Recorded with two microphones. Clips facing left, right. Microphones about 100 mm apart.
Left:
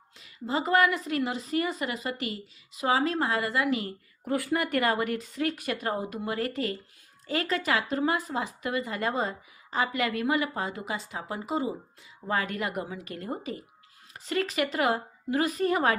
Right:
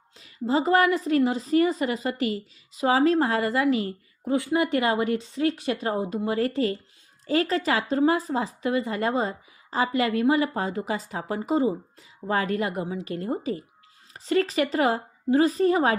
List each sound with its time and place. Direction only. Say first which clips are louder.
0.2 s a woman's voice: right 6 dB; 35° right (ahead or behind)
4.3 s a woman's voice: right 4 dB; 25° right (ahead or behind)